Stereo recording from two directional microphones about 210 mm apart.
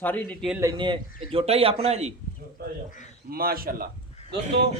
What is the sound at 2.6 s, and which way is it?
A man's voice, 45° right (ahead or behind).